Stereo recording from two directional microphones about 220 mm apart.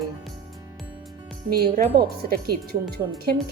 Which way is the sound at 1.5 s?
40° right (ahead or behind).